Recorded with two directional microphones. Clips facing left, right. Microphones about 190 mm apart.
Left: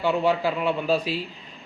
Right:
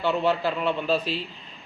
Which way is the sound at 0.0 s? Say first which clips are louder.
Left 1 dB; 10° left (ahead or behind).